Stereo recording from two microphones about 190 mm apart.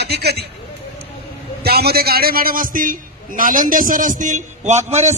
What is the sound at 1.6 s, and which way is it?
A man's voice, 55° right (ahead or behind).